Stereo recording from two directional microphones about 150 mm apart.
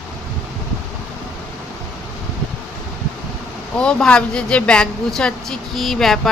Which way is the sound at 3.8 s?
5° left (ahead or behind).